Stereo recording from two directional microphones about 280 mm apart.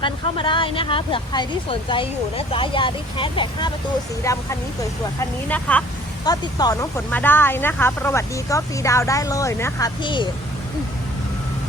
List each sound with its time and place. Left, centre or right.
0.0 s speech: centre